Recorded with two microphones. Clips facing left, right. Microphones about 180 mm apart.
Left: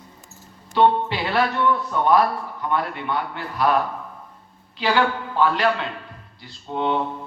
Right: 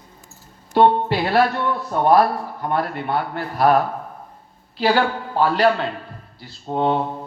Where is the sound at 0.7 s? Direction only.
45° right (ahead or behind).